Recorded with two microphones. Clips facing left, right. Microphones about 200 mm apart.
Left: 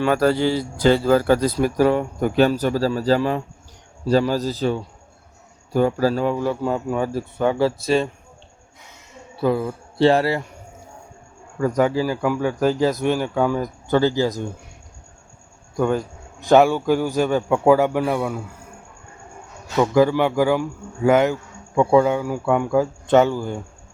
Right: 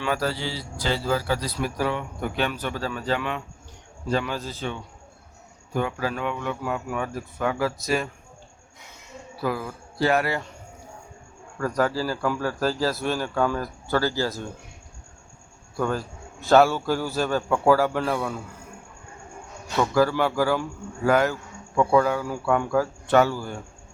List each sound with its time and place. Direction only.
0.0 s a man's voice: 50° left (ahead or behind); by 8.1 s 30° left (ahead or behind)
9.3 s speech: 25° left (ahead or behind)
11.6 s speech: 20° left (ahead or behind)
15.7 s speech: 20° left (ahead or behind)
19.8 s speech: 20° left (ahead or behind)